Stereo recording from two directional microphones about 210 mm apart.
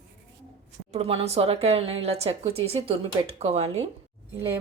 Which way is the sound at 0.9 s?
30° right (ahead or behind).